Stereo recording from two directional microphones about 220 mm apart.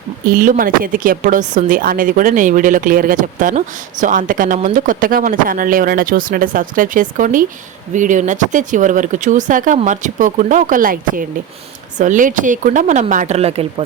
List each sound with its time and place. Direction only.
0.3 s speech: 40° right (ahead or behind)